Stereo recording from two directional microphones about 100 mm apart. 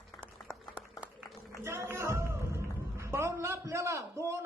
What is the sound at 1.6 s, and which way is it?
A man's voice, 25° right (ahead or behind).